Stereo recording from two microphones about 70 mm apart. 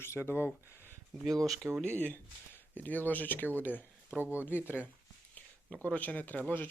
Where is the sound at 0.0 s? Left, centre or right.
Left.